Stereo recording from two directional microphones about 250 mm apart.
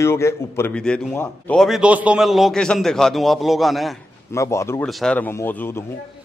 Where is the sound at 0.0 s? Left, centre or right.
Centre.